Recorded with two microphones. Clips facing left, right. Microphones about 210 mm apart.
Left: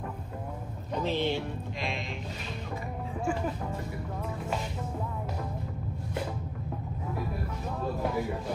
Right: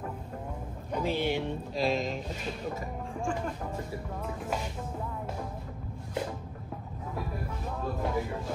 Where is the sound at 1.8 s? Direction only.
40° right (ahead or behind).